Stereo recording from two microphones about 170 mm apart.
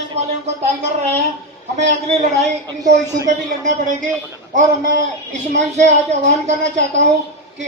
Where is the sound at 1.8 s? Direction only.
45° right (ahead or behind).